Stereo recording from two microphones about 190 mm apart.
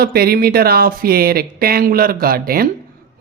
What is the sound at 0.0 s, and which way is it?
Speech, 55° right (ahead or behind).